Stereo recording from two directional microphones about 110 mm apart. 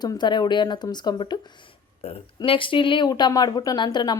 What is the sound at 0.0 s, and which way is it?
Speech, 40° left (ahead or behind).